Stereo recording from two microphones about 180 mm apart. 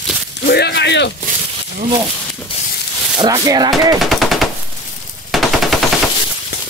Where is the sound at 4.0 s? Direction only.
Centre (ahead or behind).